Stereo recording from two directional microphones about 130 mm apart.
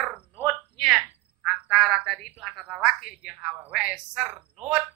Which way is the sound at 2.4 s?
Centre (ahead or behind).